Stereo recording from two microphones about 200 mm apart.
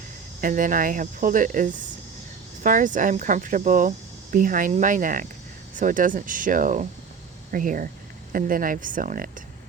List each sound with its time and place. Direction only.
0.4 s speech: 40° right (ahead or behind)